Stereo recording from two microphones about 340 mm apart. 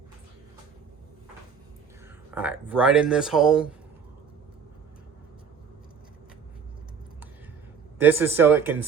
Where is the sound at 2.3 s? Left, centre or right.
Centre.